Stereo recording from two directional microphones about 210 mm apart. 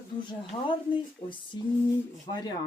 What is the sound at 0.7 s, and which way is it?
Speech, 25° left (ahead or behind).